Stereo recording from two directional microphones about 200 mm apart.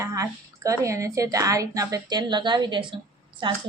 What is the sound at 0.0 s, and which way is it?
Speech, 15° right (ahead or behind).